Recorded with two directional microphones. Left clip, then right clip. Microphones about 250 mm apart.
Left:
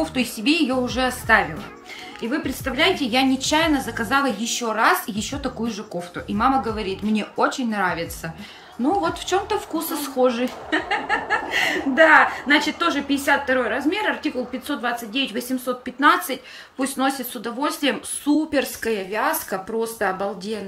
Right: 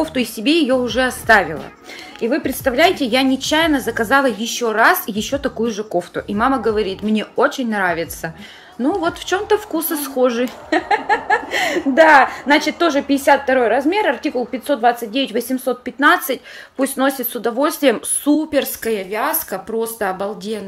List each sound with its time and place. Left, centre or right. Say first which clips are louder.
0.0 s speech: right 4 dB; centre